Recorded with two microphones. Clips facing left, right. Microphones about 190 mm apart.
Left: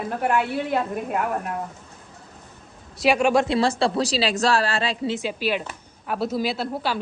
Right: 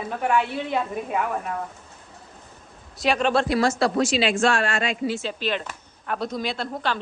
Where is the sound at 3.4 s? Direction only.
30° left (ahead or behind).